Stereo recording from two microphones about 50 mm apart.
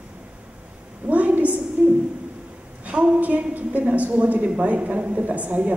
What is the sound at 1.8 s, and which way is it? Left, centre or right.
A man's voice, right.